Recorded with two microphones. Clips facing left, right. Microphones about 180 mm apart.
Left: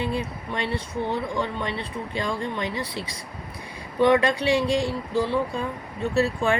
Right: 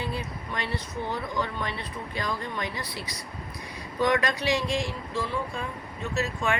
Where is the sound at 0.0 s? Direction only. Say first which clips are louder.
Left 5 dB; 25° left (ahead or behind).